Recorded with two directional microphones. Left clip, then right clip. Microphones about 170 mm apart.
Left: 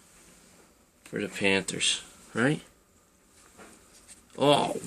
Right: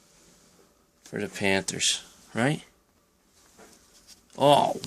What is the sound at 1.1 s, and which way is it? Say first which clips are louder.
Speech: even; 45° right (ahead or behind).